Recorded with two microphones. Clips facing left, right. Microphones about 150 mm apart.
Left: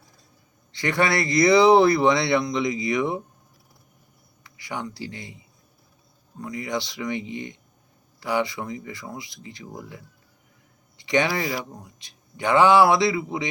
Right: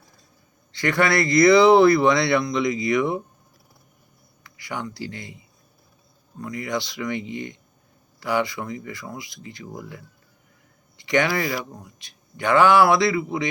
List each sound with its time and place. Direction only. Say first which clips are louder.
0.7 s speech: right 2 dB; 25° left (ahead or behind)
4.4 s speech: right 1 dB; 25° left (ahead or behind)
6.4 s speech: right 1 dB; 20° left (ahead or behind)